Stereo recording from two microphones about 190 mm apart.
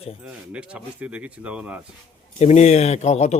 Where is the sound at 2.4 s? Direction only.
35° left (ahead or behind).